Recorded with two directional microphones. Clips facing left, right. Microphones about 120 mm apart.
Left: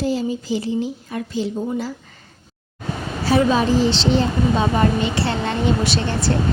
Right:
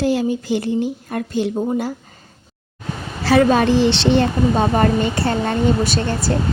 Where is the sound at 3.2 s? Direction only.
90° right.